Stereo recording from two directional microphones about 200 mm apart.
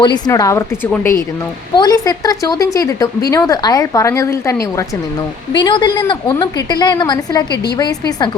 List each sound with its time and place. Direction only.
0.0 s a woman's voice: 20° left (ahead or behind)
1.7 s a woman's voice: 20° left (ahead or behind)